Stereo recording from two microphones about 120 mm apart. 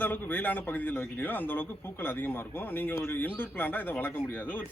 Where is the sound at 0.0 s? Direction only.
15° left (ahead or behind).